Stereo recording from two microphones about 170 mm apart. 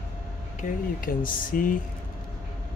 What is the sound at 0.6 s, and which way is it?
Speech, 55° left (ahead or behind).